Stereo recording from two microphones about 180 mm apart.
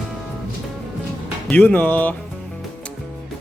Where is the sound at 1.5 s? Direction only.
5° left (ahead or behind).